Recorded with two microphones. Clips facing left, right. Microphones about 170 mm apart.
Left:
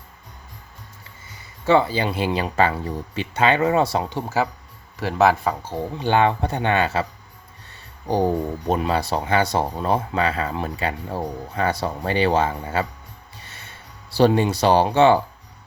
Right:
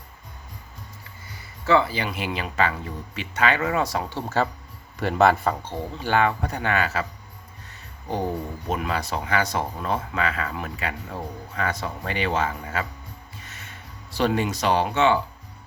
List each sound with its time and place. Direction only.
1.6 s speech: 25° left (ahead or behind)
4.9 s speech: centre (ahead or behind)
6.0 s speech: 25° left (ahead or behind)
13.4 s music: 30° left (ahead or behind)
14.2 s speech: 30° left (ahead or behind)